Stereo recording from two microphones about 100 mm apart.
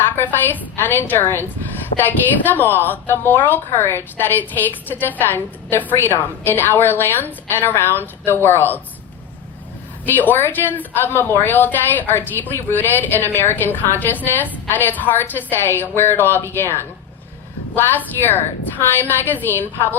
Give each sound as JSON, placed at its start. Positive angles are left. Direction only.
{"t": 0.0, "sound": "a woman's voice", "side_deg": 20}
{"t": 10.1, "sound": "a woman's voice", "side_deg": 20}